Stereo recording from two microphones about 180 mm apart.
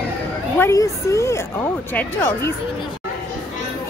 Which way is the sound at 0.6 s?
15° left (ahead or behind).